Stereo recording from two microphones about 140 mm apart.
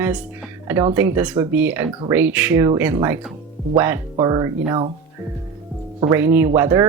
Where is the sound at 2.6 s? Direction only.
20° right (ahead or behind).